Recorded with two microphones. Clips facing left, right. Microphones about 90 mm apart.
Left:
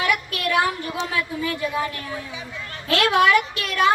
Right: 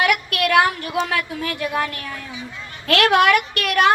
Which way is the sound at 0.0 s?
70° right (ahead or behind).